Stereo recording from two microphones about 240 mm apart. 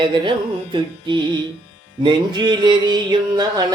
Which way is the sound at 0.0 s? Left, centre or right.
Centre.